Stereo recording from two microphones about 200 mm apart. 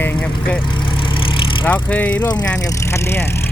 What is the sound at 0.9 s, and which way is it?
Vehicle, 25° left (ahead or behind).